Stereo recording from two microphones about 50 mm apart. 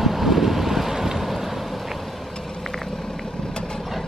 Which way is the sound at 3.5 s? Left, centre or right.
Centre.